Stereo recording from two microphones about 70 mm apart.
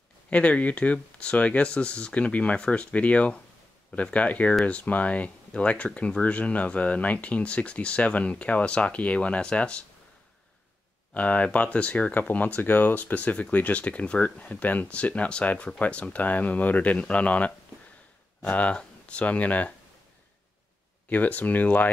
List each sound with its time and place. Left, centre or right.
0.3 s speech: centre
11.1 s speech: left
21.1 s speech: left